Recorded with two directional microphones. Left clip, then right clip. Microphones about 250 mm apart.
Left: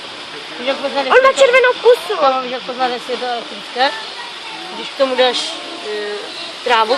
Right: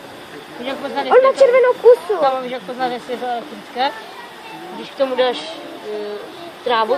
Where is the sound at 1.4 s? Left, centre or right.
Right.